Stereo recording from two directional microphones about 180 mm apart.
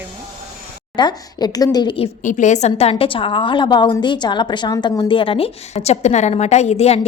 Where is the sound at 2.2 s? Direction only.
45° left (ahead or behind).